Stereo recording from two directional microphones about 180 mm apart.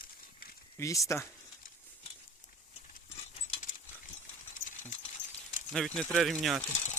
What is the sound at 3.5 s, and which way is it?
Dog, 50° left (ahead or behind).